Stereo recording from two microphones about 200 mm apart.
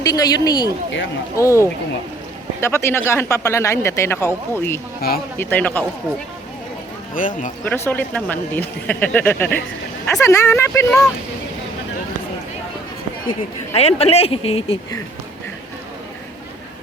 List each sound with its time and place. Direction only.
0.0 s speech: 20° left (ahead or behind)
4.9 s speech: 50° left (ahead or behind)
5.4 s speech: 10° left (ahead or behind)
7.1 s speech: 40° left (ahead or behind)
7.6 s speech: 10° left (ahead or behind)
13.7 s speech: 30° left (ahead or behind)